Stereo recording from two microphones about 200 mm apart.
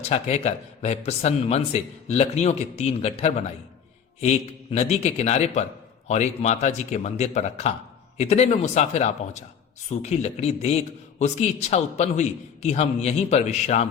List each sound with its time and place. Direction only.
0.1 s a man's voice: 30° left (ahead or behind)